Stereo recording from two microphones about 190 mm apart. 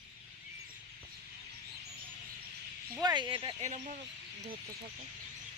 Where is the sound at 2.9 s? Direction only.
20° right (ahead or behind).